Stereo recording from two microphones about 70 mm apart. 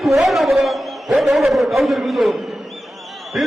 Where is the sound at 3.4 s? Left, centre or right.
Centre.